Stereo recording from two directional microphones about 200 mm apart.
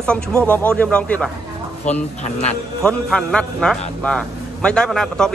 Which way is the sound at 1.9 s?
35° left (ahead or behind).